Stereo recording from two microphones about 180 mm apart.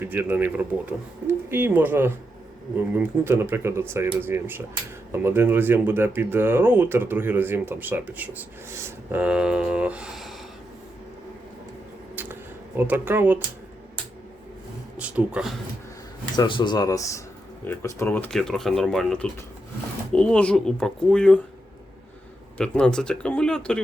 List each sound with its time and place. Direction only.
0.0 s speech: 10° right (ahead or behind)
12.1 s a sound: 10° right (ahead or behind)
14.9 s speech: 5° right (ahead or behind)
16.3 s speech: 25° left (ahead or behind); by 21.4 s 5° left (ahead or behind)
22.5 s speech: 5° left (ahead or behind)